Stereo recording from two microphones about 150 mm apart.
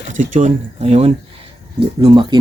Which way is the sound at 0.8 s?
40° right (ahead or behind).